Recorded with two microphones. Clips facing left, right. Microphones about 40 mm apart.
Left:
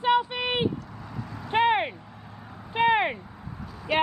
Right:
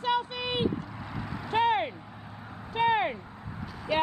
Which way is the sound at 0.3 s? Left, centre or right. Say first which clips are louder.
Left 4 dB; left.